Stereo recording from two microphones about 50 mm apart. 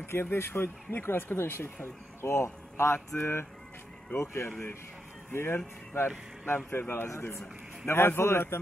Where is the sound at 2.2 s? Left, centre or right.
Left.